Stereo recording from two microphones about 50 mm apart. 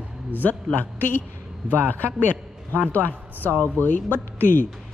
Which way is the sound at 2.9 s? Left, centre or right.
Left.